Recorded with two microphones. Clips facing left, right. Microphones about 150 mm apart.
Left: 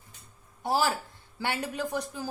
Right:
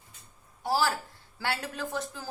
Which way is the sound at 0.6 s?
20° left (ahead or behind).